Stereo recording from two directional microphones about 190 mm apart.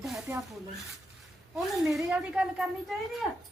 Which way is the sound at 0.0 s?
Centre (ahead or behind).